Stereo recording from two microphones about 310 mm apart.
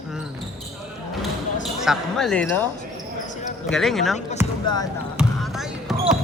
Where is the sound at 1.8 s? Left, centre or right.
Centre.